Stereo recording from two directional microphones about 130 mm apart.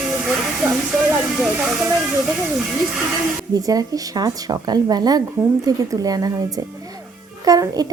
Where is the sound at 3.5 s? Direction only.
30° right (ahead or behind).